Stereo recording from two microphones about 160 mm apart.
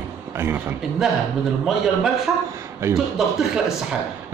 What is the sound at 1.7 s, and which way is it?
Speech, centre (ahead or behind).